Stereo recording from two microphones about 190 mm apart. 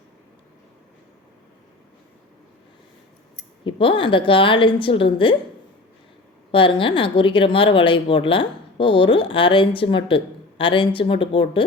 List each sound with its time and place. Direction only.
3.6 s speech: 25° left (ahead or behind)
6.5 s speech: 25° left (ahead or behind)